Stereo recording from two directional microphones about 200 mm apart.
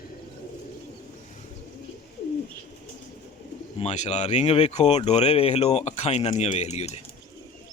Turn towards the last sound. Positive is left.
turn(degrees=35)  # may be behind; listen again after turning